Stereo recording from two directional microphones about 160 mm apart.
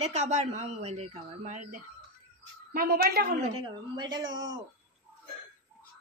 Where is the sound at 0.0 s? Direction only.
45° right (ahead or behind).